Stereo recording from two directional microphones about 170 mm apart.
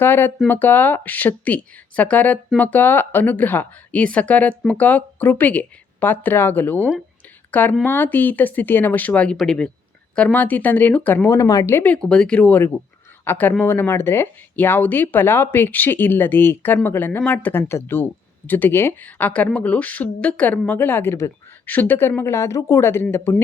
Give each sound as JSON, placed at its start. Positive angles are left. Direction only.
{"t": 0.0, "sound": "speech", "side_deg": 10}